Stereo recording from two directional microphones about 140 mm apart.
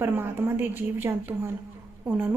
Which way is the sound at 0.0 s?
15° right (ahead or behind).